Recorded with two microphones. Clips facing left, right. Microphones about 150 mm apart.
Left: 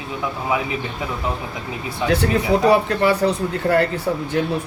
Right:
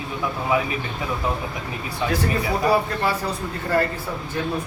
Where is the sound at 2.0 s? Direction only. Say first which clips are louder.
Left 5 dB; 75° left (ahead or behind).